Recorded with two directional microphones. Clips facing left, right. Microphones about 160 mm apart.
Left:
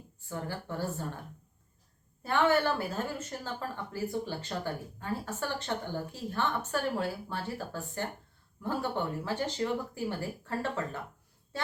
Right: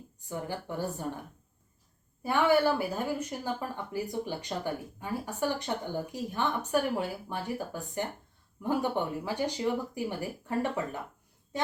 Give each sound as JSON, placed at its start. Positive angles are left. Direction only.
{"t": 0.3, "sound": "a woman's voice", "side_deg": -15}
{"t": 2.2, "sound": "a woman's voice", "side_deg": -10}
{"t": 11.5, "sound": "a sound", "side_deg": -20}